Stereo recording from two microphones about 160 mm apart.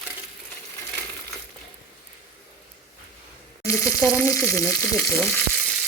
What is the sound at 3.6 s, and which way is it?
Frying, 15° left (ahead or behind).